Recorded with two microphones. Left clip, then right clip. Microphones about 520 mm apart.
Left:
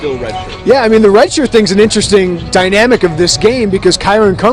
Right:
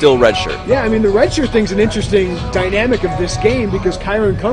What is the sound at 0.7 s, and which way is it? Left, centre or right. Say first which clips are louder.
Speech: left 6 dB; left.